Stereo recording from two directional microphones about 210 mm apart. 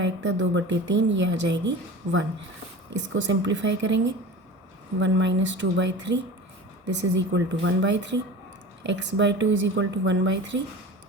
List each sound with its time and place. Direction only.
0.0 s speech: 60° right (ahead or behind)
2.0 s speech: 30° right (ahead or behind)
3.1 s speech: 60° right (ahead or behind)